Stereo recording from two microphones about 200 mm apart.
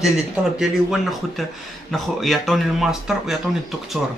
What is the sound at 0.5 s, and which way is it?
Speech, centre (ahead or behind).